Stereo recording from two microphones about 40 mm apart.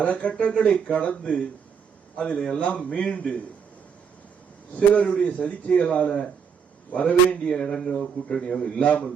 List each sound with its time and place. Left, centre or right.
0.0 s a man's voice: left
4.7 s a man's voice: left
8.6 s a man's voice: left